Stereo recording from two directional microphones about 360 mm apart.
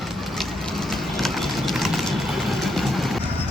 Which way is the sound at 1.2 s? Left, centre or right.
Centre.